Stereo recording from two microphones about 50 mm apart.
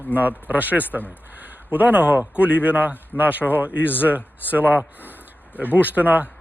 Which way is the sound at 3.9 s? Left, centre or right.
Right.